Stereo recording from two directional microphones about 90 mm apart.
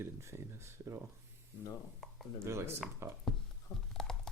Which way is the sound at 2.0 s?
Centre (ahead or behind).